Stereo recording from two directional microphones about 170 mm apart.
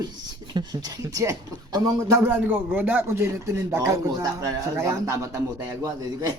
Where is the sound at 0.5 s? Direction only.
25° right (ahead or behind).